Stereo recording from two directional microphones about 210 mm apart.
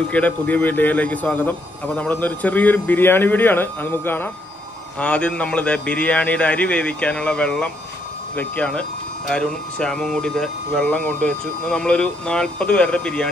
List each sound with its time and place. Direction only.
0.1 s a man's voice: 5° left (ahead or behind)